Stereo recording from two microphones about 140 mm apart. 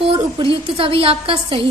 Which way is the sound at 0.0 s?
40° right (ahead or behind).